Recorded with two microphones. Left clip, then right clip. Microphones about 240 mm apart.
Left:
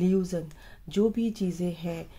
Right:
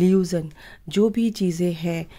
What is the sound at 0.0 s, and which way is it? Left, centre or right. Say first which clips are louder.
Speech: right 7 dB; right.